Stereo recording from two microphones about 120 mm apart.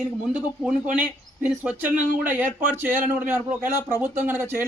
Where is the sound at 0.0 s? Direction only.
5° right (ahead or behind).